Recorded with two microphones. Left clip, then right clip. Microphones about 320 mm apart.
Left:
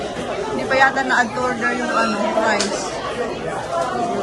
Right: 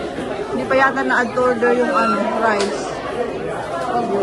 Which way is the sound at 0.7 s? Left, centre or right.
Centre.